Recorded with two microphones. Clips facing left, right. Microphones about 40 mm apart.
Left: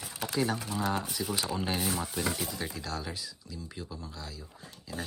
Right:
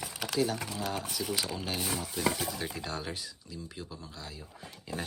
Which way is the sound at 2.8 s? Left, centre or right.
Centre.